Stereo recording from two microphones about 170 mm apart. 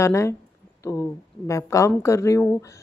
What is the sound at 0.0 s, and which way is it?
Speech, 15° left (ahead or behind).